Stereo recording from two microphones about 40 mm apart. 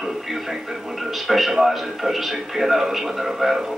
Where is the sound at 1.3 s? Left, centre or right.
Centre.